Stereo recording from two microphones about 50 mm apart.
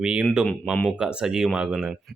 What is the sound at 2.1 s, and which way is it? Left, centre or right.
Speech, centre.